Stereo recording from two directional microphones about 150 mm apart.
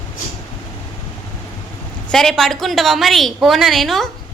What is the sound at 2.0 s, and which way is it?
A woman's voice, 5° left (ahead or behind).